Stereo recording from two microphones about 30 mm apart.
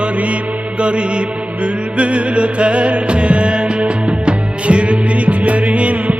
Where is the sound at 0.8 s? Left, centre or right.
Right.